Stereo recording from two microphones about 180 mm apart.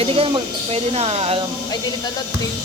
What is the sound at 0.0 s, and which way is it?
Speech, 30° right (ahead or behind).